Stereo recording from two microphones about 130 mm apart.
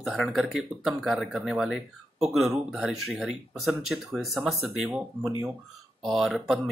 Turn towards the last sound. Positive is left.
turn(degrees=0)  # may be behind; listen again after turning